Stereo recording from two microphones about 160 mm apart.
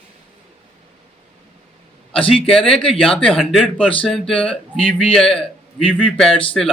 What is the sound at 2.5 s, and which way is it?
Speech, centre (ahead or behind).